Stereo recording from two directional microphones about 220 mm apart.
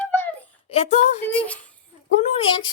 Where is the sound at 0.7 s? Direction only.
30° left (ahead or behind).